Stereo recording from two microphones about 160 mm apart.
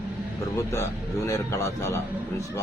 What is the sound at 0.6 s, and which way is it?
A man's voice, 20° left (ahead or behind).